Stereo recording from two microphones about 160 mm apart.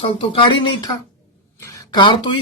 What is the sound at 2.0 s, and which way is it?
Speech, 30° left (ahead or behind).